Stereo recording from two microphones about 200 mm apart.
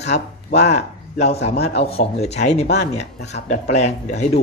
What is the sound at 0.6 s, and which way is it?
Speech, 35° left (ahead or behind).